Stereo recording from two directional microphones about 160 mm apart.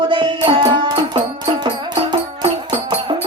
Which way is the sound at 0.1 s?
30° right (ahead or behind).